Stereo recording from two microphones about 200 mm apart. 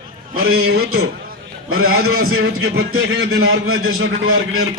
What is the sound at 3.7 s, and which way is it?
Speech, 90° right.